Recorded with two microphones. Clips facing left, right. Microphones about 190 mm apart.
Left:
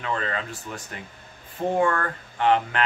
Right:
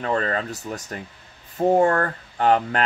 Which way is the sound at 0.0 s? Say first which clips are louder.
Right 5 dB; 40° right (ahead or behind).